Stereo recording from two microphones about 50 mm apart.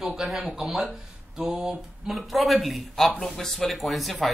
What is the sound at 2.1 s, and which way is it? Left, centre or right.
Speech, centre.